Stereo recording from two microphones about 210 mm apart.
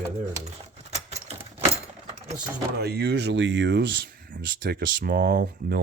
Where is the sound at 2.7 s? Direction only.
50° right (ahead or behind).